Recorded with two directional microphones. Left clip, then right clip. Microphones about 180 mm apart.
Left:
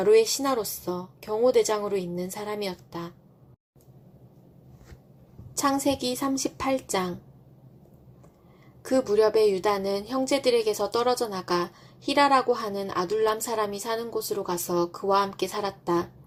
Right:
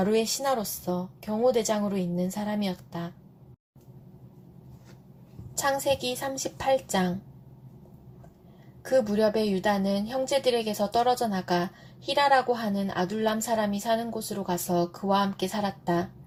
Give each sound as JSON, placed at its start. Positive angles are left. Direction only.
{"t": 0.0, "sound": "a woman's voice", "side_deg": 40}
{"t": 5.5, "sound": "a woman's voice", "side_deg": 40}
{"t": 8.8, "sound": "a woman's voice", "side_deg": 40}